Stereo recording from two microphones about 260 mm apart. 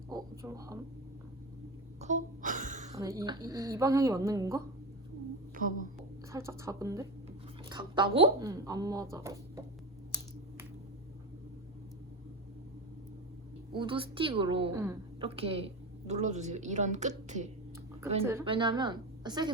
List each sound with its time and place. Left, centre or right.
0.1 s a sound: centre
2.0 s gasp: right
3.0 s speech: centre
5.6 s hum: right
6.3 s speech: centre
13.7 s a woman's voice: centre
18.3 s speech: centre